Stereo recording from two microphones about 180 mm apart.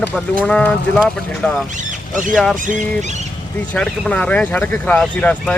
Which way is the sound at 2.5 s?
45° right (ahead or behind).